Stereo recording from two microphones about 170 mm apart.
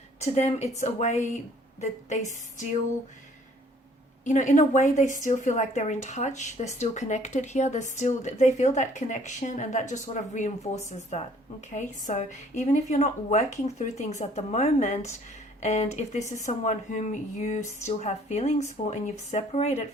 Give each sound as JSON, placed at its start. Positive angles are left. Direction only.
{"t": 0.2, "sound": "a woman's voice", "side_deg": 40}
{"t": 4.3, "sound": "speech", "side_deg": 45}
{"t": 11.7, "sound": "a woman's voice", "side_deg": 45}